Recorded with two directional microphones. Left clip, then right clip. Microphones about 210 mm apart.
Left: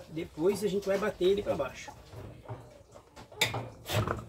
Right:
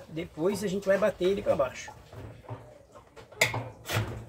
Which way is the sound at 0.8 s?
5° right (ahead or behind).